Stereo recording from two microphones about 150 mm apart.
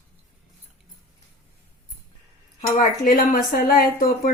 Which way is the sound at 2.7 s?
60° left (ahead or behind).